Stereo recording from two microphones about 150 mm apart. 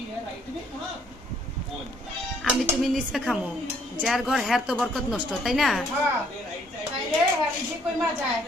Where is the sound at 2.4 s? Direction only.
5° right (ahead or behind).